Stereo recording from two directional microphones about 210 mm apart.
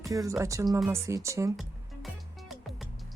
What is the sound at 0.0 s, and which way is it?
Speech, 15° right (ahead or behind).